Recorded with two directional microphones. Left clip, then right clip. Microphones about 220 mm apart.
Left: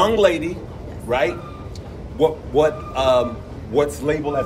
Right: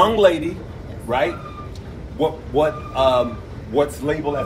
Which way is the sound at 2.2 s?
Centre (ahead or behind).